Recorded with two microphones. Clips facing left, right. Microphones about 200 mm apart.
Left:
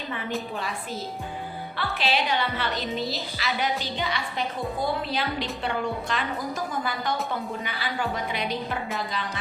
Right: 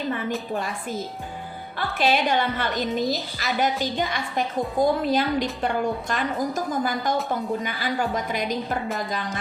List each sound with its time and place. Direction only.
0.5 s a woman's voice: 50° right (ahead or behind)